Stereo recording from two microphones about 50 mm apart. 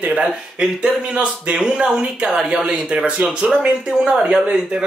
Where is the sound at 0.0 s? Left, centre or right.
Right.